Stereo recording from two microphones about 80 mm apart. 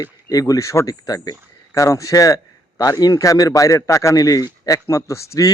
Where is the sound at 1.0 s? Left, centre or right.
Left.